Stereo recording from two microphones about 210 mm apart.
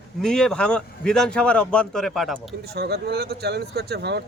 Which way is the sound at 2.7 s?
50° right (ahead or behind).